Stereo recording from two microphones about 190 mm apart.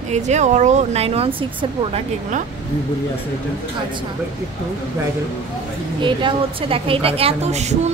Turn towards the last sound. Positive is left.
turn(degrees=-35)  # may be behind; listen again after turning